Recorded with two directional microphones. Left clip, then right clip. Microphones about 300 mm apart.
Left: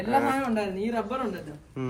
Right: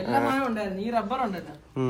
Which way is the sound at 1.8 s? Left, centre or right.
Centre.